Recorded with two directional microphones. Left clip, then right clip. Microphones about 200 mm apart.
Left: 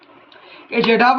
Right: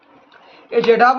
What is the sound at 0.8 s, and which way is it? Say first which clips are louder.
Speech: right 1 dB; 20° right (ahead or behind).